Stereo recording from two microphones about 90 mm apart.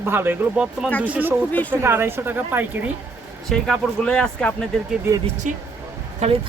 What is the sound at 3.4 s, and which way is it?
Speech, 5° left (ahead or behind).